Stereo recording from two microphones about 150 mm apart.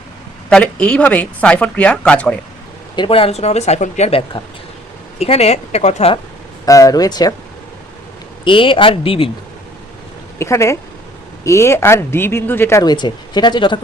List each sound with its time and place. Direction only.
0.5 s speech: 10° left (ahead or behind)
2.9 s speech: 35° left (ahead or behind)
6.7 s speech: 20° left (ahead or behind)
8.4 s speech: 35° left (ahead or behind)
10.3 s speech: 20° left (ahead or behind)